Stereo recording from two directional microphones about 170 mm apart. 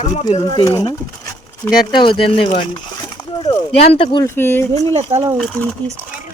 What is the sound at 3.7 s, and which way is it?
Speech, 35° left (ahead or behind).